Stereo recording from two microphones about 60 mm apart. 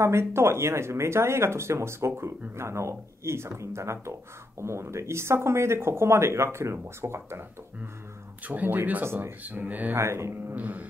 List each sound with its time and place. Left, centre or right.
0.0 s speech: right
8.5 s speech: right
9.0 s speech: right
9.4 s speech: right
9.9 s speech: right
10.5 s speech: right